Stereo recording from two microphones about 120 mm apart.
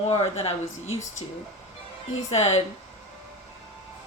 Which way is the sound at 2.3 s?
65° left (ahead or behind).